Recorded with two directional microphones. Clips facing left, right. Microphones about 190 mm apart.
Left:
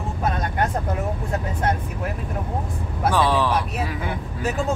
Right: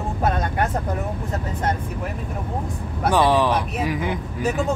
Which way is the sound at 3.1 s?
15° right (ahead or behind).